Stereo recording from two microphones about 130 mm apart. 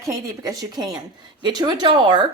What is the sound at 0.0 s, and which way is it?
A woman's voice, 25° right (ahead or behind).